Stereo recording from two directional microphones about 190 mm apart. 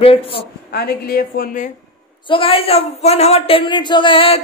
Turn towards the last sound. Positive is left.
turn(degrees=30)  # may be behind; listen again after turning